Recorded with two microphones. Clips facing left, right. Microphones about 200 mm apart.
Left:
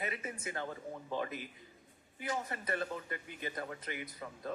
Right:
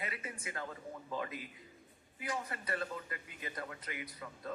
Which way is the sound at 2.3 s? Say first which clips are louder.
Left 2 dB; 25° left (ahead or behind).